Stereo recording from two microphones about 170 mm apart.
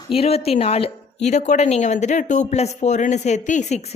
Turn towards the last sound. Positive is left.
turn(degrees=45)  # may be behind; listen again after turning